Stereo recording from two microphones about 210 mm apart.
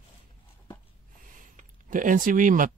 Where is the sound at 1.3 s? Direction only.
40° right (ahead or behind).